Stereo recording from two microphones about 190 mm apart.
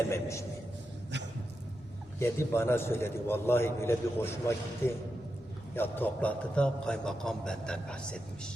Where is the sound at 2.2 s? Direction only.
15° left (ahead or behind).